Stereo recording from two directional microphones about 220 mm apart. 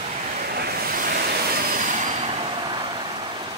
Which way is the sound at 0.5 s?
45° right (ahead or behind).